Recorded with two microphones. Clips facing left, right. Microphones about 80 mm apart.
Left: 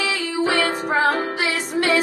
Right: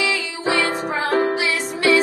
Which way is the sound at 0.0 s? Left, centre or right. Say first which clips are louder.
Left 1 dB; left.